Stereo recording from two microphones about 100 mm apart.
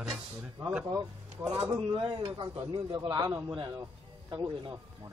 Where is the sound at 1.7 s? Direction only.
55° right (ahead or behind).